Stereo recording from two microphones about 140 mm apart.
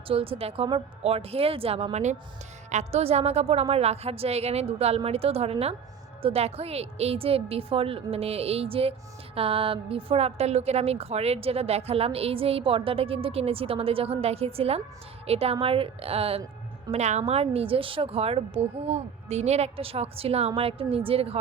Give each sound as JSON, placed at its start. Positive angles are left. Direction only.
{"t": 0.1, "sound": "a woman's voice", "side_deg": -40}
{"t": 16.9, "sound": "a woman's voice", "side_deg": -55}